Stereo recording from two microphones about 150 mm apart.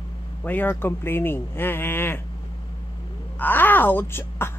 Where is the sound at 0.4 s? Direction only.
10° left (ahead or behind).